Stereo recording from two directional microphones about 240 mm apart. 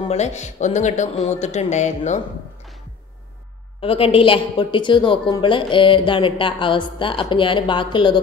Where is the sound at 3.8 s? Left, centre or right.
Left.